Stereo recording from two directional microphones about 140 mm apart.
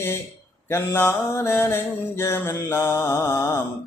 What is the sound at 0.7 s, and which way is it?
Mantra, 15° left (ahead or behind).